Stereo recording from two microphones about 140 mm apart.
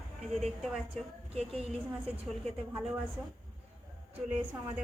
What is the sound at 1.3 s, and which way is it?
Speech, 45° right (ahead or behind).